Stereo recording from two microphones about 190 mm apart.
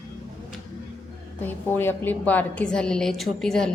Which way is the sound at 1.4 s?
10° left (ahead or behind).